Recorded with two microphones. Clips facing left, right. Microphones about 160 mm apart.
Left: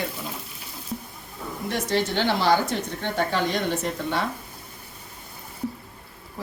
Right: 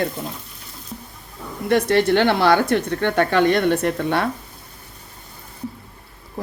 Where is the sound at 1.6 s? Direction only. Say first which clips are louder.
Right 9 dB; 60° right (ahead or behind).